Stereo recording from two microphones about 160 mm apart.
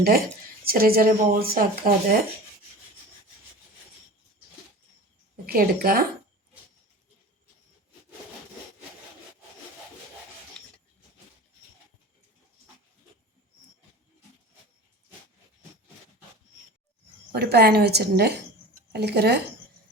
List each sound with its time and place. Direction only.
0.6 s speech: 70° right (ahead or behind)
5.5 s speech: 70° right (ahead or behind)
17.3 s a woman's voice: 90° right